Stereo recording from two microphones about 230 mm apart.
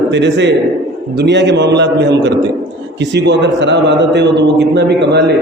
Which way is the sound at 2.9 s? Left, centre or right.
Right.